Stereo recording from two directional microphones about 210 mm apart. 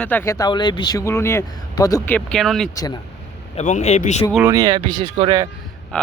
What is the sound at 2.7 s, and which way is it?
Speech, 15° left (ahead or behind).